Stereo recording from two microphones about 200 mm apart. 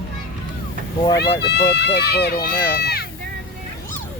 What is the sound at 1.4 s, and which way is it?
Speech, 55° left (ahead or behind).